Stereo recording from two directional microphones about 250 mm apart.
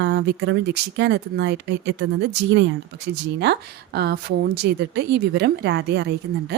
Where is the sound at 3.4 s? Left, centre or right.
Right.